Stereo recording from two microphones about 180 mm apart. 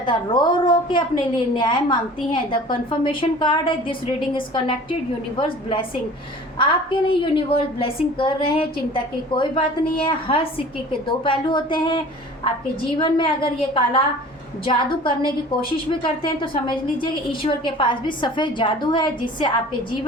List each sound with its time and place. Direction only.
0.0 s a woman's voice: 25° left (ahead or behind)